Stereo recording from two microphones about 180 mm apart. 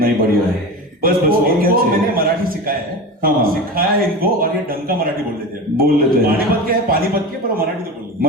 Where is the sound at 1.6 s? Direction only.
55° right (ahead or behind).